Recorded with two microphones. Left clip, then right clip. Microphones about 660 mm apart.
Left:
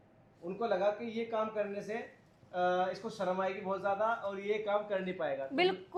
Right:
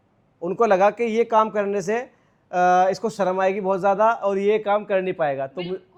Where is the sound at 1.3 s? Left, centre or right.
Right.